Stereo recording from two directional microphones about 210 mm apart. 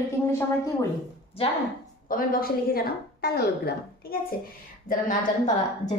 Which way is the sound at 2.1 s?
45° left (ahead or behind).